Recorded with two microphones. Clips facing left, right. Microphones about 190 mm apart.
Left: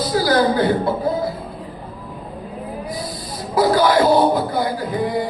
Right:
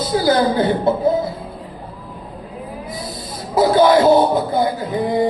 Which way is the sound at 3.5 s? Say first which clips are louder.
Right 3 dB; 25° right (ahead or behind).